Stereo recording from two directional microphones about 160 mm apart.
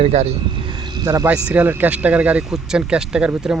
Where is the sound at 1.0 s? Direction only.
20° right (ahead or behind).